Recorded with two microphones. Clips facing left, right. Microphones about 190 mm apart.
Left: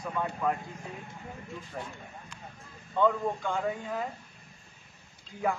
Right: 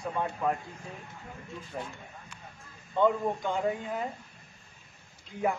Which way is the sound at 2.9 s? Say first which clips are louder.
Right 1 dB; 20° right (ahead or behind).